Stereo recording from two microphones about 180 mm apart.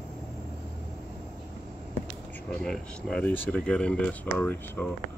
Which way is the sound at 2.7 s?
5° left (ahead or behind).